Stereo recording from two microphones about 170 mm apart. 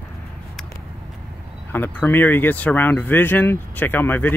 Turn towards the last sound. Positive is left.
turn(degrees=10)  # may be behind; listen again after turning